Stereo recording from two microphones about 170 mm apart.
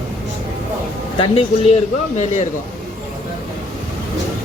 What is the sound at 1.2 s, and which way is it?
Speech, 35° left (ahead or behind).